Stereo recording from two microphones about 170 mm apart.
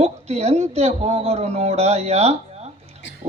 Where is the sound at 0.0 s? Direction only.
40° right (ahead or behind).